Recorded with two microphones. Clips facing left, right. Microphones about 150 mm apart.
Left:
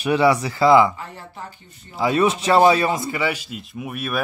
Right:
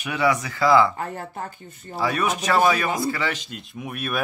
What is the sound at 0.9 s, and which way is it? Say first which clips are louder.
Speech: right 5 dB; 50° right (ahead or behind).